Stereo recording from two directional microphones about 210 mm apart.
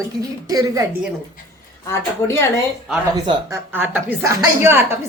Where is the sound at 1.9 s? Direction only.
10° left (ahead or behind).